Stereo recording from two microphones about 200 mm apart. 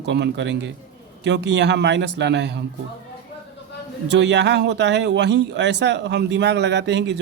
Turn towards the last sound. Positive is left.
turn(degrees=-60)  # may be behind; listen again after turning